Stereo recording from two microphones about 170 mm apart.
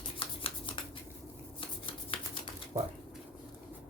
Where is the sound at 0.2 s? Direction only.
30° left (ahead or behind).